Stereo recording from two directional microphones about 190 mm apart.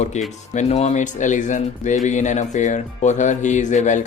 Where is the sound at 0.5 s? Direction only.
35° left (ahead or behind).